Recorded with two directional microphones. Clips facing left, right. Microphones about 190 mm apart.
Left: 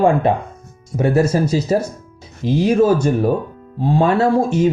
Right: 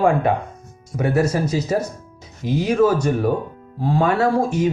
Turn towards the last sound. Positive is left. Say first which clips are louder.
# left 3 dB
turn(degrees=25)  # may be behind; listen again after turning